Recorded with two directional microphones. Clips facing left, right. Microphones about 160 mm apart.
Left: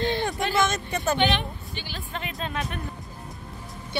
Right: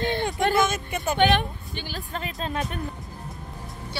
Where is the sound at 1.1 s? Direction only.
50° right (ahead or behind).